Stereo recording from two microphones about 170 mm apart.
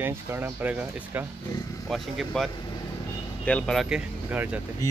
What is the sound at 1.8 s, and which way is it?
Speech, centre (ahead or behind).